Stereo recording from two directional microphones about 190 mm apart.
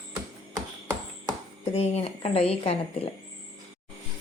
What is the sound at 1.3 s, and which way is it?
Chopping, 30° left (ahead or behind).